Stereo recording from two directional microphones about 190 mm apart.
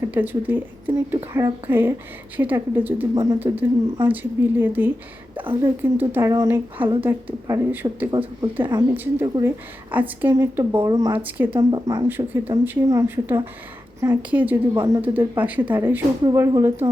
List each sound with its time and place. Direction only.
0.1 s speech: 10° right (ahead or behind)
5.4 s speech: 25° right (ahead or behind)
5.8 s speech: 10° right (ahead or behind)
8.1 s speech: 20° right (ahead or behind)
11.2 s speech: 10° right (ahead or behind)
11.7 s speech: 20° right (ahead or behind)